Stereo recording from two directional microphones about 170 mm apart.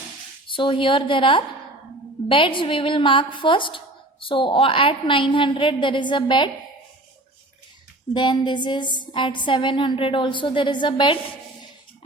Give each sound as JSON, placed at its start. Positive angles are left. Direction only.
{"t": 0.4, "sound": "a woman's voice", "side_deg": 30}
{"t": 8.1, "sound": "a woman's voice", "side_deg": 25}